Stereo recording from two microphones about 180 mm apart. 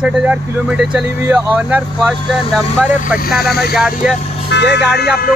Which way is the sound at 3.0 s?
55° left (ahead or behind).